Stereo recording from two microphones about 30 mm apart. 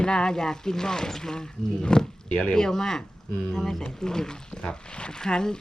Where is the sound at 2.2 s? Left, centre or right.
Left.